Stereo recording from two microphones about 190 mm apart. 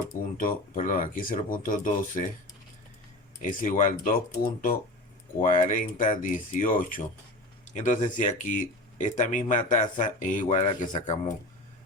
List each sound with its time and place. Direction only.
0.1 s speech: 45° left (ahead or behind)
3.4 s speech: 45° left (ahead or behind)
5.4 s speech: 40° left (ahead or behind)